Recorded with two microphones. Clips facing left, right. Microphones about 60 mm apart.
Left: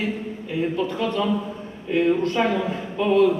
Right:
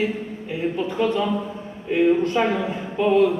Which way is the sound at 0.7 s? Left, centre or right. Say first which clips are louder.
Right 2 dB; centre.